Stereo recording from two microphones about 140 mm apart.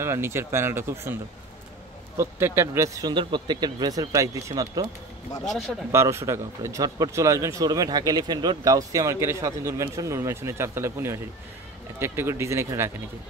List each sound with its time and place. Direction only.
0.0 s speech: 20° right (ahead or behind)
2.1 s speech: 15° right (ahead or behind)
5.4 s speech: 5° left (ahead or behind)
5.9 s speech: 20° right (ahead or behind)